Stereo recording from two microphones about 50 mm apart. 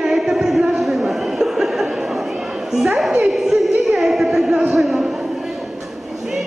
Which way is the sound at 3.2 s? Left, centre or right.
Centre.